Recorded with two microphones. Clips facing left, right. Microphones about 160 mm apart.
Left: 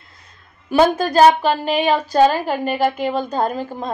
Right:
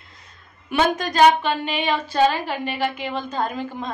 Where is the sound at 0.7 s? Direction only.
35° left (ahead or behind).